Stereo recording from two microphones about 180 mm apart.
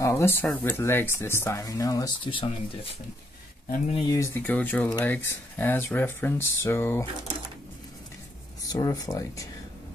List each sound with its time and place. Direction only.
0.0 s a sound: 15° left (ahead or behind)
0.5 s speech: 10° left (ahead or behind); by 3.0 s 30° left (ahead or behind)
3.7 s speech: 40° left (ahead or behind)
4.0 s speech: 15° left (ahead or behind)
8.6 s speech: 20° left (ahead or behind)